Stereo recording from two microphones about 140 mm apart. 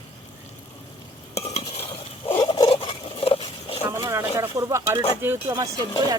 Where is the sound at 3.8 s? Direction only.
20° right (ahead or behind).